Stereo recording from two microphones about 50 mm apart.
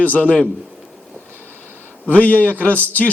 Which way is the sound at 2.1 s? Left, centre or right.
Left.